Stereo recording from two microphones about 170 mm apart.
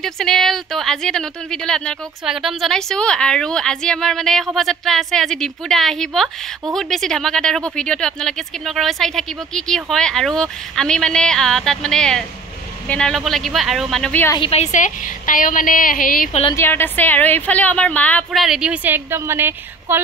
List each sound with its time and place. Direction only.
0.0 s speech: centre (ahead or behind)
14.3 s a woman's voice: 35° left (ahead or behind); by 16.3 s 55° left (ahead or behind)
16.5 s a woman's voice: 10° left (ahead or behind); by 20.0 s 15° right (ahead or behind)